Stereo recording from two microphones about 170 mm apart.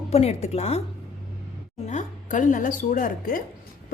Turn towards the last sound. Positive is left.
turn(degrees=55)  # may be behind; listen again after turning